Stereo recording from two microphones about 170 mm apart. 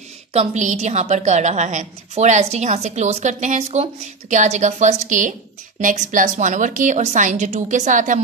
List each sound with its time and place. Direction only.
0.3 s a woman's voice: 40° right (ahead or behind)